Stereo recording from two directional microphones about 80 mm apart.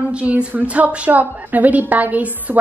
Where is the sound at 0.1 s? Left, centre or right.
Centre.